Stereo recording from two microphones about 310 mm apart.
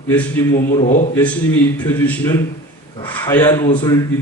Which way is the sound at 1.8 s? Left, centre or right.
Centre.